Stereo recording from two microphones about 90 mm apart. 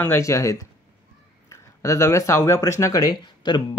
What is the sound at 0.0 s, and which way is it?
Speech, 30° left (ahead or behind).